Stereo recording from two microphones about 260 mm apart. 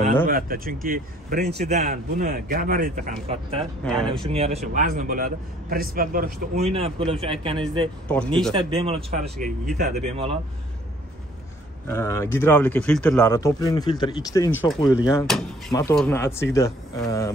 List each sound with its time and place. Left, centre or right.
0.3 s a man's voice: right
3.8 s speech: centre
4.2 s a man's voice: right
8.1 s speech: centre
8.5 s a man's voice: right
11.9 s speech: centre